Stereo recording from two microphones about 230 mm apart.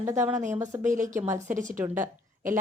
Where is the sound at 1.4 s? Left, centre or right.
Right.